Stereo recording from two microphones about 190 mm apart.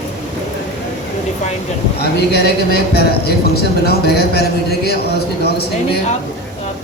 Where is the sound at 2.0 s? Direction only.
55° left (ahead or behind).